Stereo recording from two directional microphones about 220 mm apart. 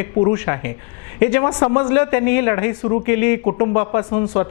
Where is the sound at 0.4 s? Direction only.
15° left (ahead or behind).